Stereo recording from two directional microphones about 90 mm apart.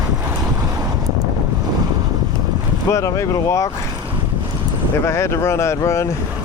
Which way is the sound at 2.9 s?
35° left (ahead or behind).